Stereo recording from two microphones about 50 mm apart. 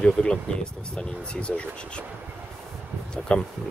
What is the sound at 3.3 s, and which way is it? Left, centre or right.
Speech, left.